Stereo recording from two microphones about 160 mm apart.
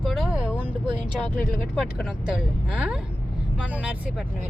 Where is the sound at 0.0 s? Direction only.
Centre (ahead or behind).